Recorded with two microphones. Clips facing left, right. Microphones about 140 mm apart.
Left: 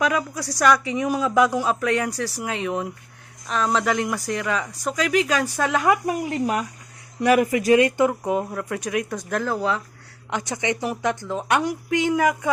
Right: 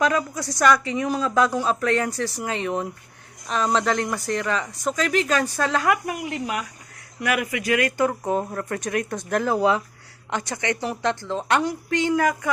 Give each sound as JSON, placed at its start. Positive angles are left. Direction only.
{"t": 0.0, "sound": "a woman's voice", "side_deg": 5}
{"t": 6.1, "sound": "speech", "side_deg": 30}
{"t": 8.2, "sound": "speech", "side_deg": 5}
{"t": 9.6, "sound": "speech", "side_deg": -15}
{"t": 10.2, "sound": "a woman's voice", "side_deg": 10}